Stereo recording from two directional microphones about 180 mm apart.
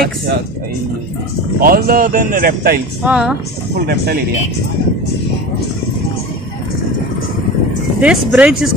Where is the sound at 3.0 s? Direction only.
5° right (ahead or behind).